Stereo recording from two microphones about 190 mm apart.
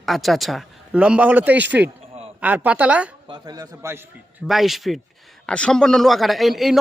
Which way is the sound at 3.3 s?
20° right (ahead or behind).